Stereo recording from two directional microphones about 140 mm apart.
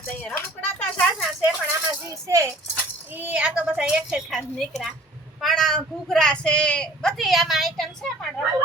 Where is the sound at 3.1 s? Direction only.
10° right (ahead or behind).